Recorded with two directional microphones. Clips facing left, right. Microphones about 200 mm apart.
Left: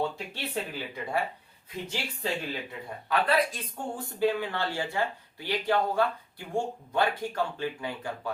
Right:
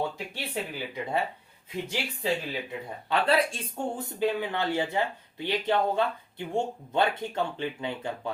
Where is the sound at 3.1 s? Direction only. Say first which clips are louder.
Right 1 dB; 30° right (ahead or behind).